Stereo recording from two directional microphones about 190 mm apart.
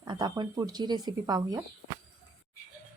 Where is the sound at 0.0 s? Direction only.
20° right (ahead or behind).